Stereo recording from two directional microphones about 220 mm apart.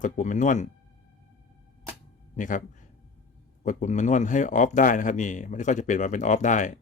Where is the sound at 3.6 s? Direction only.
35° left (ahead or behind).